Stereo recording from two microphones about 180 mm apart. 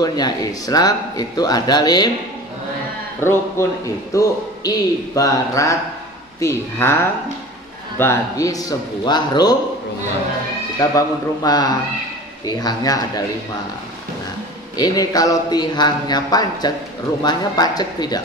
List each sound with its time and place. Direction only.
0.0 s speech: 20° left (ahead or behind)
3.2 s a man's voice: 15° left (ahead or behind)
10.8 s speech: 20° left (ahead or behind)
14.8 s speech: 20° left (ahead or behind)